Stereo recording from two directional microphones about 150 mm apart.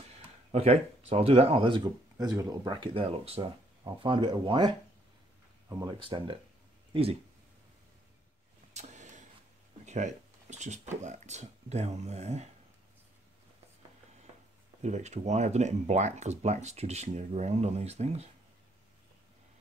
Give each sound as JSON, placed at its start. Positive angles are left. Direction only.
{"t": 0.1, "sound": "speech", "side_deg": -45}
{"t": 2.1, "sound": "speech", "side_deg": -25}
{"t": 5.9, "sound": "speech", "side_deg": -35}
{"t": 8.7, "sound": "a sound", "side_deg": -50}
{"t": 11.1, "sound": "speech", "side_deg": -50}
{"t": 14.8, "sound": "speech", "side_deg": -50}